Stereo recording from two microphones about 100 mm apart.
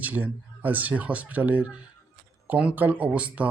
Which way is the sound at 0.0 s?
15° right (ahead or behind).